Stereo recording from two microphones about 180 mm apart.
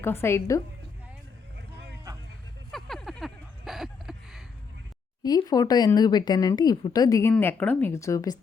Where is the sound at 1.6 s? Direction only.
70° right (ahead or behind).